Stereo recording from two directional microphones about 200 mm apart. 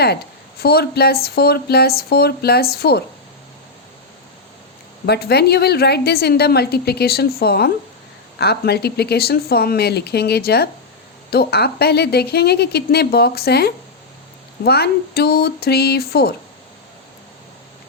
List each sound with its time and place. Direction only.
0.6 s a woman's voice: 50° left (ahead or behind)
5.0 s a woman's voice: 55° left (ahead or behind)